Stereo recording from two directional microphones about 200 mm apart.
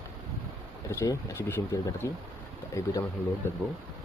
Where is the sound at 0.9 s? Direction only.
15° left (ahead or behind).